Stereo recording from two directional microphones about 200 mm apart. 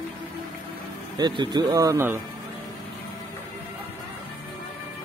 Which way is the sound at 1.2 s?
20° right (ahead or behind).